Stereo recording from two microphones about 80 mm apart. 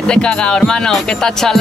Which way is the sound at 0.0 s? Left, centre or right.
Centre.